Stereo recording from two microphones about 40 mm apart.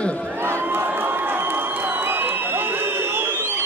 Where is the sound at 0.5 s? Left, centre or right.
Right.